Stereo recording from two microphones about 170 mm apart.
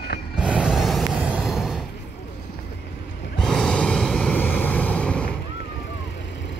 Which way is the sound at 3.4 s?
5° left (ahead or behind).